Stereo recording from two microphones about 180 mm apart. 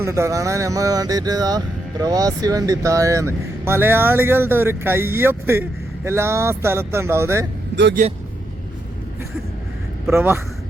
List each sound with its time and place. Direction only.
0.0 s speech: 15° right (ahead or behind)
8.0 s a man's voice: 40° right (ahead or behind)
10.1 s speech: 15° right (ahead or behind)